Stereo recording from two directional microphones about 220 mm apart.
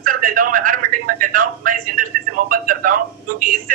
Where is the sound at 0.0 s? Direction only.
40° right (ahead or behind).